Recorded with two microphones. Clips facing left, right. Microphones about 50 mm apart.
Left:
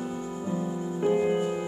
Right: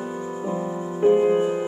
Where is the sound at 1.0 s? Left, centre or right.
Right.